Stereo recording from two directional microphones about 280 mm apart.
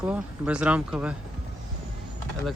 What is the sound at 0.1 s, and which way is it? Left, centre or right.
Speech, centre.